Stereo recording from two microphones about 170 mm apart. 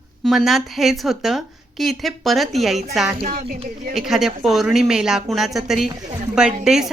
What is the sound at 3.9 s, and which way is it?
Speech, centre (ahead or behind).